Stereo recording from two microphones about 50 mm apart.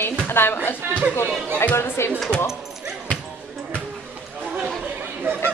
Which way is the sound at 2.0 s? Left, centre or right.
Left.